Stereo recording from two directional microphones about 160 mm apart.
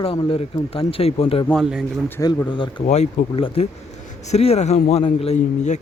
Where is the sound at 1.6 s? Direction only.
5° right (ahead or behind).